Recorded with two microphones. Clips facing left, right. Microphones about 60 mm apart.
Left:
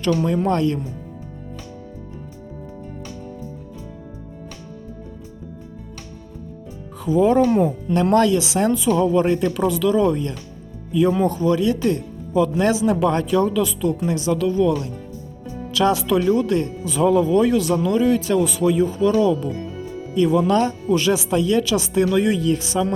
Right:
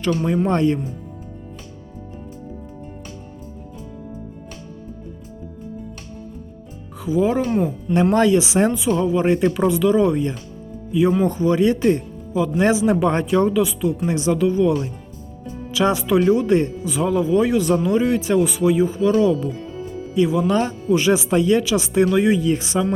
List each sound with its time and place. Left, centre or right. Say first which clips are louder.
0.1 s speech: even; right
7.0 s speech: left 3 dB; centre
7.6 s speech: even; centre
8.7 s speech: left 2 dB; centre; by 12.0 s right
12.3 s speech: even; centre
16.8 s speech: left 3 dB; centre
19.1 s speech: right 2 dB; right
20.1 s speech: left 1 dB; centre